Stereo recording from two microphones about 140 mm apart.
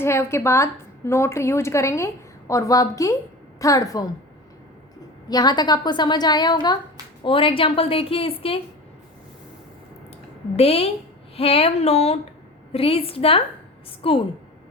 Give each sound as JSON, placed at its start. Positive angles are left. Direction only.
{"t": 0.0, "sound": "a woman's voice", "side_deg": 20}
{"t": 5.3, "sound": "a woman's voice", "side_deg": 30}
{"t": 10.6, "sound": "a sound", "side_deg": 45}
{"t": 14.0, "sound": "a woman's voice", "side_deg": 40}